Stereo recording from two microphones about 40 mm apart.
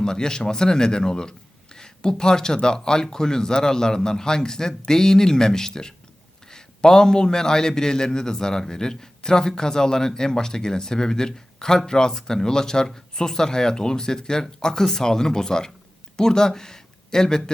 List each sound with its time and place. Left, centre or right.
0.0 s a man's voice: centre